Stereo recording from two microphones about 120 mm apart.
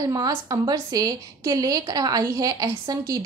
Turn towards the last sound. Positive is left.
turn(degrees=-30)  # may be behind; listen again after turning